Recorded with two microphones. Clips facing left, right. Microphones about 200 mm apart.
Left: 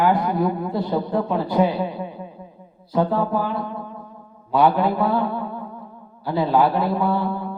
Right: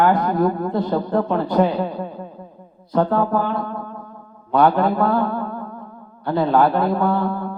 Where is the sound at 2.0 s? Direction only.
50° right (ahead or behind).